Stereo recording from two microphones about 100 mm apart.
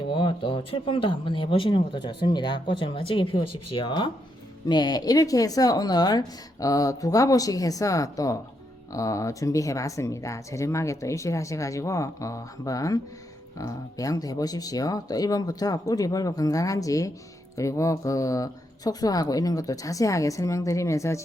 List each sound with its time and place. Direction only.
0.1 s speech: 55° left (ahead or behind)
4.7 s speech: 45° left (ahead or behind)